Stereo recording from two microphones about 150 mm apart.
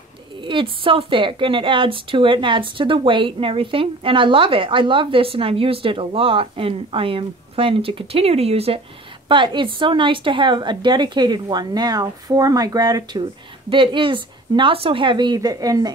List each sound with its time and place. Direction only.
0.4 s a woman's voice: 35° right (ahead or behind)